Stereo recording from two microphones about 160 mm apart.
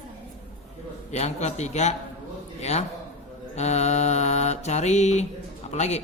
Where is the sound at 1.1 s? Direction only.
45° left (ahead or behind).